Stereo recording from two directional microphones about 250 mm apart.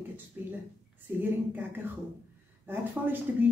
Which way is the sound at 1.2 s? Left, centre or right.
Centre.